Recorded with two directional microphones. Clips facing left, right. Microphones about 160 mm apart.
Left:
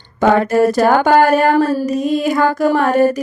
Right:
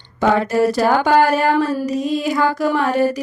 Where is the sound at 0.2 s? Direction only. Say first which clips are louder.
Left 3 dB; 55° left (ahead or behind).